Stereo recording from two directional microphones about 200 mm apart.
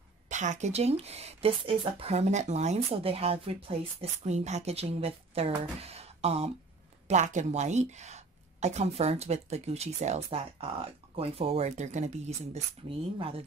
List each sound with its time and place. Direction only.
0.3 s speech: 35° right (ahead or behind)